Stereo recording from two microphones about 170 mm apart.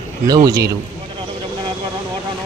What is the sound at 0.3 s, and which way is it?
Speech, 20° right (ahead or behind).